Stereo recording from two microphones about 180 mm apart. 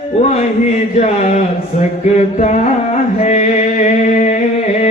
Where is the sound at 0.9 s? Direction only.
40° left (ahead or behind).